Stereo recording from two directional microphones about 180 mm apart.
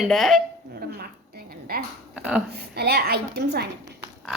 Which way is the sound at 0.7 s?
60° right (ahead or behind).